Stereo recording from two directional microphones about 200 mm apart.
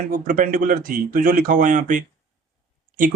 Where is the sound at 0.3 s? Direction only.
40° right (ahead or behind).